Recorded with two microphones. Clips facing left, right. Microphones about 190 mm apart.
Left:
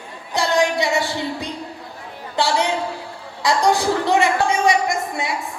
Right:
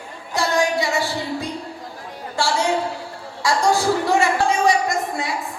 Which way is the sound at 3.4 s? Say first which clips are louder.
Left 1 dB; 20° left (ahead or behind).